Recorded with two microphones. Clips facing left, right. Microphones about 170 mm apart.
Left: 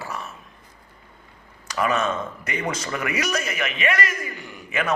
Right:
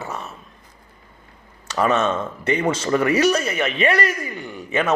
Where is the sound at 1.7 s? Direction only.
30° right (ahead or behind).